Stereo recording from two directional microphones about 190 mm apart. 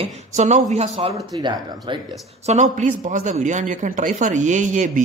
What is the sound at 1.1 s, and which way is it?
Speech, 20° right (ahead or behind).